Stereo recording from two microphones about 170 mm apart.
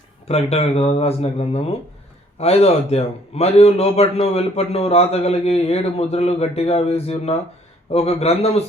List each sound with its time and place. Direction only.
0.3 s a man's voice: 35° left (ahead or behind)